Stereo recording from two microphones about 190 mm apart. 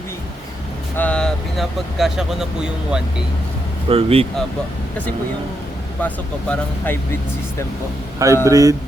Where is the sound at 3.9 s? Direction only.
30° right (ahead or behind).